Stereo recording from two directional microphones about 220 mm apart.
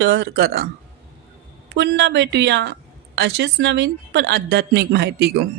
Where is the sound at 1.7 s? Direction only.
50° right (ahead or behind).